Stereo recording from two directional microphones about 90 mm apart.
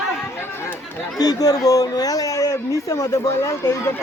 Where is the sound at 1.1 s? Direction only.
45° left (ahead or behind).